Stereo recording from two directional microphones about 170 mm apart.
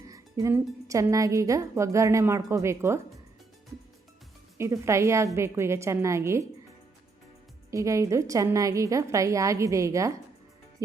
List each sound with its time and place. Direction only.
0.0 s a woman's voice: 20° right (ahead or behind)
4.5 s a woman's voice: 15° right (ahead or behind)
7.7 s a woman's voice: 20° right (ahead or behind)